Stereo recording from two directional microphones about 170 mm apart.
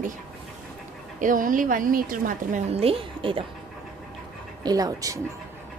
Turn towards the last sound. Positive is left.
turn(degrees=-20)  # may be behind; listen again after turning